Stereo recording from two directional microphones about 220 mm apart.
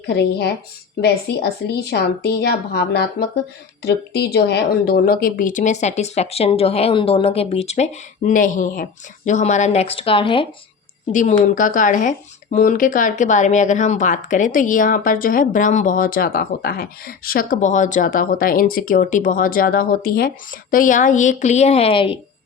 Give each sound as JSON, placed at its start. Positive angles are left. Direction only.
{"t": 0.1, "sound": "speech", "side_deg": 50}
{"t": 11.1, "sound": "speech", "side_deg": 35}